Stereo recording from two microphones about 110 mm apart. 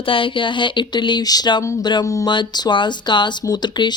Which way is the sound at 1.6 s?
25° left (ahead or behind).